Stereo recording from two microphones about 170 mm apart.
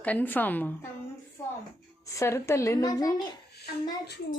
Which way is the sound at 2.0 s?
15° left (ahead or behind).